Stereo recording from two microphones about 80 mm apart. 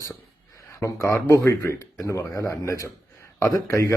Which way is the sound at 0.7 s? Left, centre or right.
Left.